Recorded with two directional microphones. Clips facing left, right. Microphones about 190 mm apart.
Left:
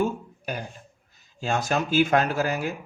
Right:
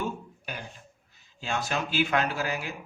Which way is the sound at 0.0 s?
45° left (ahead or behind).